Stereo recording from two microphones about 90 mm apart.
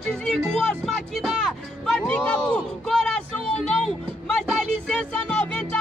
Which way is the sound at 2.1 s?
20° left (ahead or behind).